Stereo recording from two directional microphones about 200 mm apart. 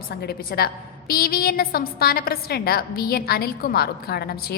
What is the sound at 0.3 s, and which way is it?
A woman's voice, 50° left (ahead or behind).